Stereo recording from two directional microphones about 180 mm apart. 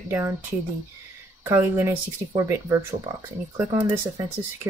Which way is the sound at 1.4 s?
15° right (ahead or behind).